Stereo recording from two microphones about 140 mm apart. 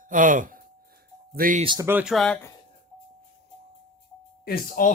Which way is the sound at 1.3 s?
85° right.